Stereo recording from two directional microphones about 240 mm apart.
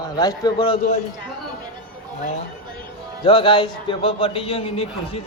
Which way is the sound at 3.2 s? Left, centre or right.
Left.